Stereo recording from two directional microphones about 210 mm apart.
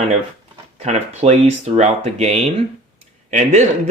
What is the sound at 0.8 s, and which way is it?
Speech, 30° right (ahead or behind).